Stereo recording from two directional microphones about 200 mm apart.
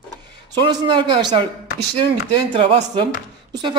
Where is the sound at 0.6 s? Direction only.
25° right (ahead or behind).